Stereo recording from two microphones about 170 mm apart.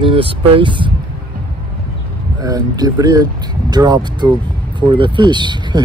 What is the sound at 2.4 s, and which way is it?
Speech, 20° right (ahead or behind).